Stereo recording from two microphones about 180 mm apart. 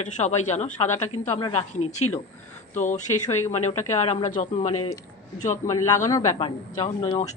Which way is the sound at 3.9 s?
30° left (ahead or behind).